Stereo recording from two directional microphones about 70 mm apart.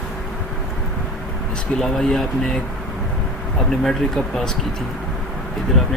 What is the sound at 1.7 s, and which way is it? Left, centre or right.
Speech, centre.